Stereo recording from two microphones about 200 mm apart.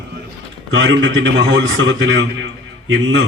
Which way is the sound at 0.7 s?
65° right (ahead or behind).